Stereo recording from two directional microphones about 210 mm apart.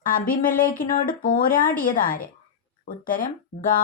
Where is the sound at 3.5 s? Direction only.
55° left (ahead or behind).